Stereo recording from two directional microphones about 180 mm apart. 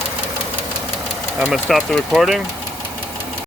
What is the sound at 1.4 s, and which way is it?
Speech, centre (ahead or behind).